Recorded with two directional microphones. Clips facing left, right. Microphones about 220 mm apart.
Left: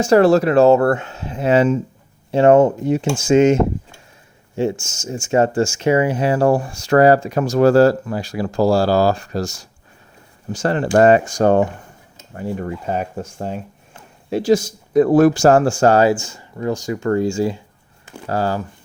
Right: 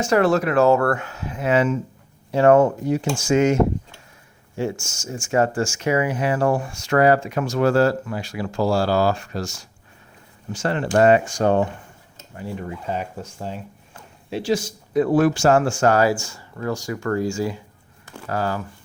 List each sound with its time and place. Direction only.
0.0 s speech: 30° left (ahead or behind)